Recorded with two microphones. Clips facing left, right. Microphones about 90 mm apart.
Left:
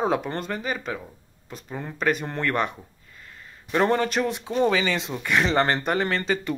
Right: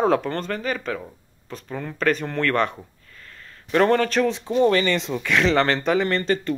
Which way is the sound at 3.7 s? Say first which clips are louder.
Right 3 dB; 15° left (ahead or behind).